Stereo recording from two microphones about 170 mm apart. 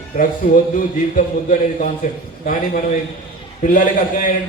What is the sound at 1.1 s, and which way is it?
Speech, 55° left (ahead or behind).